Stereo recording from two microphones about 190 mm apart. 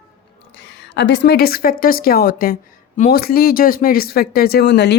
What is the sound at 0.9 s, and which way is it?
Speech, 65° left (ahead or behind).